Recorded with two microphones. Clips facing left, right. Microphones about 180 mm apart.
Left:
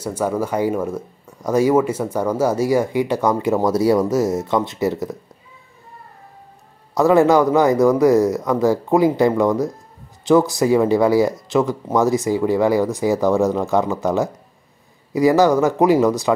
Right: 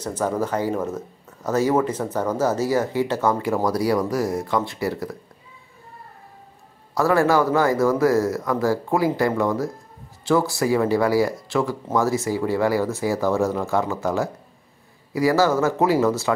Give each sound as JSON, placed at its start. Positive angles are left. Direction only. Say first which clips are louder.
{"t": 0.0, "sound": "speech", "louder": "left 2 dB", "side_deg": 10}
{"t": 6.9, "sound": "speech", "louder": "left 5 dB", "side_deg": 20}